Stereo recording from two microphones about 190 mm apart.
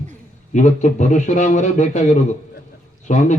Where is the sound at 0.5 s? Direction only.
40° left (ahead or behind).